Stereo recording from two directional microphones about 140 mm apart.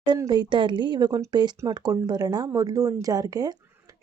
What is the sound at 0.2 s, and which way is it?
Speech, 30° right (ahead or behind).